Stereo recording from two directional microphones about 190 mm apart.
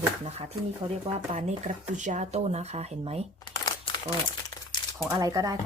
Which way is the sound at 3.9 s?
25° left (ahead or behind).